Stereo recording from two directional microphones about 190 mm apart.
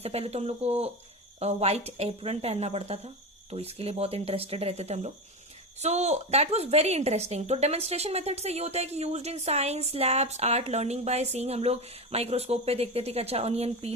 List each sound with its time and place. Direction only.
0.0 s a woman's voice: 35° right (ahead or behind)